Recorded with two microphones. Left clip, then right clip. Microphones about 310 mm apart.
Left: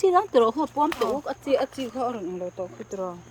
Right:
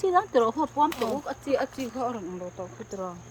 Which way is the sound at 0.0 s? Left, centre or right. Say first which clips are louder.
Left 3 dB; left.